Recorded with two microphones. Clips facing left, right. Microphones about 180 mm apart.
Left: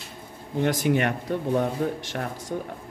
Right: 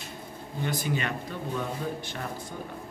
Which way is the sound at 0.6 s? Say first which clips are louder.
Left 8 dB; 80° left.